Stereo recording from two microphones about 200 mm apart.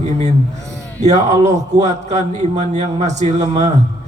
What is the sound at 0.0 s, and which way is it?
A man's voice, 35° right (ahead or behind).